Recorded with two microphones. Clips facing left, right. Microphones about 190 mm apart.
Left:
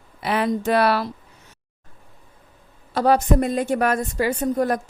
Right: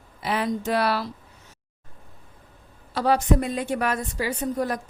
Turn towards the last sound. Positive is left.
turn(degrees=50)  # may be behind; listen again after turning